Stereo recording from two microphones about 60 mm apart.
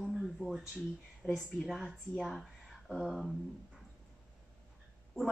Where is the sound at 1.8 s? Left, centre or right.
Centre.